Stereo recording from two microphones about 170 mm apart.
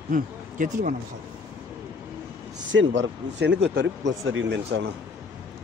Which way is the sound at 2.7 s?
90° right.